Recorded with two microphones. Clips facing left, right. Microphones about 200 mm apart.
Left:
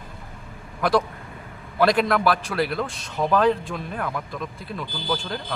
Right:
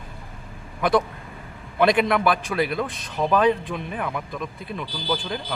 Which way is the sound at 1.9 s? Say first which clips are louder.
Even; centre (ahead or behind).